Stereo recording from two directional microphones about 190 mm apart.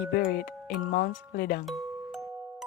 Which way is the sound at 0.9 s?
50° left (ahead or behind).